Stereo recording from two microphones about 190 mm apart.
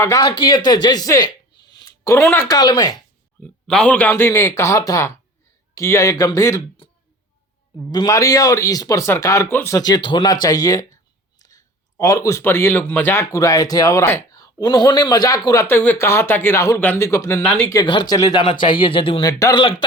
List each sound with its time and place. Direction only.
0.0 s speech: 20° left (ahead or behind)
3.4 s speech: 5° left (ahead or behind)
7.9 s speech: 20° left (ahead or behind)